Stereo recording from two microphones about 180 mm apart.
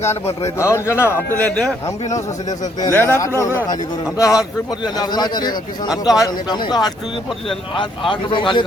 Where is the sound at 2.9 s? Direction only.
10° left (ahead or behind).